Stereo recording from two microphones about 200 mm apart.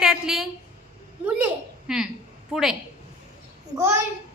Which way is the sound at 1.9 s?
5° right (ahead or behind).